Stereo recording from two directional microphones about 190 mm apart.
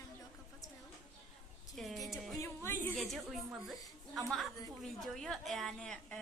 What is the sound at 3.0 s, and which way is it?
A woman's voice, centre (ahead or behind).